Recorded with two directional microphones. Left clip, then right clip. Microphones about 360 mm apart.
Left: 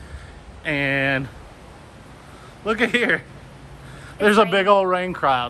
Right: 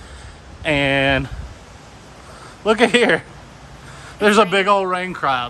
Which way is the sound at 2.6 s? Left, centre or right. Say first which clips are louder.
Right 5 dB; centre.